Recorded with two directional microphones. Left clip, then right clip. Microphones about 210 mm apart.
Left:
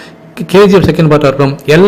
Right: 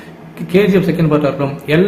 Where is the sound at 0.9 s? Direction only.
50° left (ahead or behind).